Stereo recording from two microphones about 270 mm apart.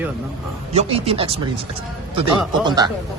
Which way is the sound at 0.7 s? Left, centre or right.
Right.